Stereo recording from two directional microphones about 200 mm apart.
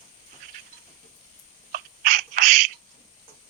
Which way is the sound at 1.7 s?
40° right (ahead or behind).